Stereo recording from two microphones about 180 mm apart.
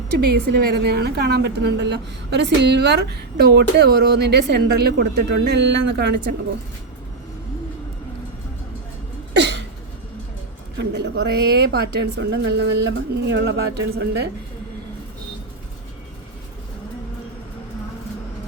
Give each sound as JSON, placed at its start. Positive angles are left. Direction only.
{"t": 0.2, "sound": "a woman's voice", "side_deg": -60}
{"t": 9.3, "sound": "a sound", "side_deg": -75}
{"t": 10.8, "sound": "a woman's voice", "side_deg": -70}